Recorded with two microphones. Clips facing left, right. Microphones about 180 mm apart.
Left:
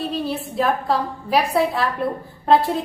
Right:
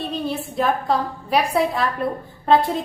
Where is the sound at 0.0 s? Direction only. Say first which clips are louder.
Left 1 dB; centre (ahead or behind).